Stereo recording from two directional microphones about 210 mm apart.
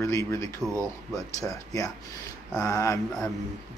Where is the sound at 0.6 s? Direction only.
15° right (ahead or behind).